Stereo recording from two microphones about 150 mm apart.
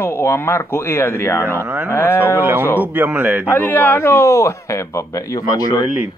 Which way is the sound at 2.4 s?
15° right (ahead or behind).